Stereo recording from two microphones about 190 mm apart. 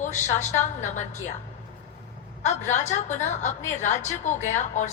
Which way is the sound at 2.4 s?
40° left (ahead or behind).